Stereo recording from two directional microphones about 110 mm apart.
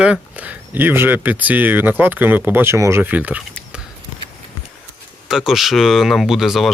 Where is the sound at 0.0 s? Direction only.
10° right (ahead or behind).